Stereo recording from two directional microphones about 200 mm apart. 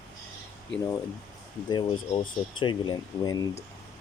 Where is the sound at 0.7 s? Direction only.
65° left (ahead or behind).